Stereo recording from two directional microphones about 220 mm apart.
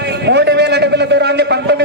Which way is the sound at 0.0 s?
50° right (ahead or behind).